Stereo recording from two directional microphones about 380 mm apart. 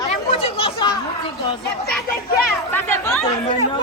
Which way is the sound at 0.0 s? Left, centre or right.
Centre.